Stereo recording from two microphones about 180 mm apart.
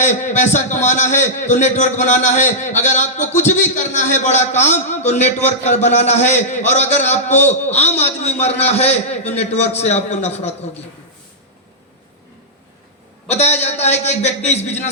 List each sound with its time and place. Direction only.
0.0 s a man's voice: 40° left (ahead or behind)
13.2 s a man's voice: 40° left (ahead or behind)